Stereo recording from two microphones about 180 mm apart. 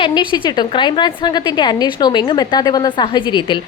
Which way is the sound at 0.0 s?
25° left (ahead or behind).